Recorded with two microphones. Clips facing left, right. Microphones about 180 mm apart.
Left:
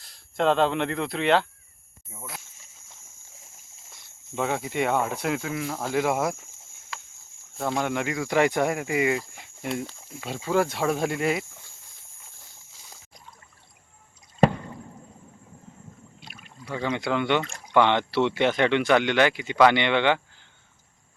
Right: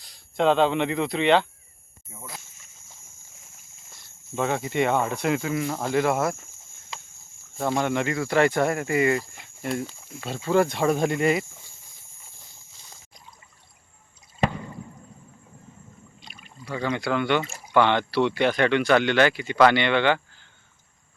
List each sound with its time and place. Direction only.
0.0 s speech: centre (ahead or behind)
4.4 s speech: 5° left (ahead or behind)
7.5 s speech: centre (ahead or behind)
12.7 s boat: 5° left (ahead or behind)
16.2 s rowboat: centre (ahead or behind)
16.9 s speech: 20° left (ahead or behind)
17.4 s a sound: 5° right (ahead or behind)
17.7 s speech: 20° left (ahead or behind)